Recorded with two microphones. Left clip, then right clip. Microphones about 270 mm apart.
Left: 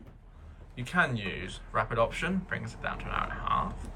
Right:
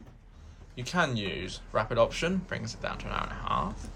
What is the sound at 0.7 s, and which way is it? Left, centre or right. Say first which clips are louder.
Speech: left 1 dB; centre.